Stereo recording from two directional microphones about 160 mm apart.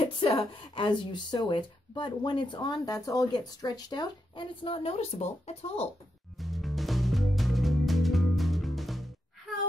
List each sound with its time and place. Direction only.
0.0 s speech: 35° left (ahead or behind)
6.4 s music: centre (ahead or behind)